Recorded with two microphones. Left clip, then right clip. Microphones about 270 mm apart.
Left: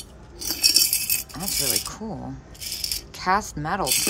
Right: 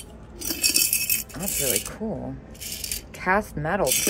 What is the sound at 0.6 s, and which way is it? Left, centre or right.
Rattle, centre.